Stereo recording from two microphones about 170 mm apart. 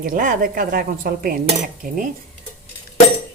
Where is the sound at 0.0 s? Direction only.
50° right (ahead or behind).